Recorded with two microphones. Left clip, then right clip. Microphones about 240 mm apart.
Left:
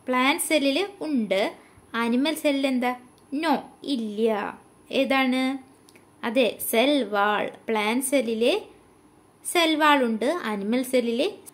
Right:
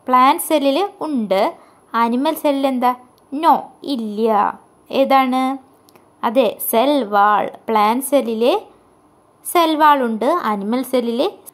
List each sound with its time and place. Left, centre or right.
0.0 s a woman's voice: centre